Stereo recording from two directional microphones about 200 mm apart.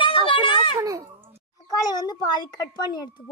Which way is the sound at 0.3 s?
25° left (ahead or behind).